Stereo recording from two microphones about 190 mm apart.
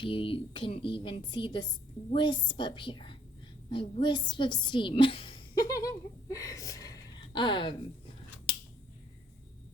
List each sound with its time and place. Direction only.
0.0 s a woman's voice: 25° left (ahead or behind)